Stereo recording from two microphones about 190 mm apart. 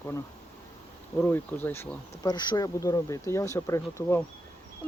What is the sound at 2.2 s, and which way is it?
Speech, 20° left (ahead or behind).